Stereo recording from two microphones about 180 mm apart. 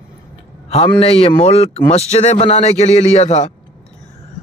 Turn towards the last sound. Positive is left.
turn(degrees=35)  # may be behind; listen again after turning